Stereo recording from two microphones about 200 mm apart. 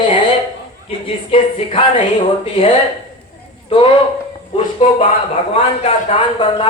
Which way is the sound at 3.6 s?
25° left (ahead or behind).